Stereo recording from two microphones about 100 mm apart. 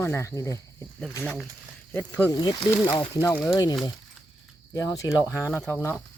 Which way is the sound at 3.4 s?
30° left (ahead or behind).